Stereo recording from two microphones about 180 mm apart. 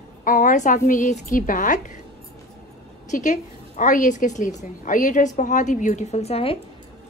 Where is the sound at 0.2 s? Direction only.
50° left (ahead or behind).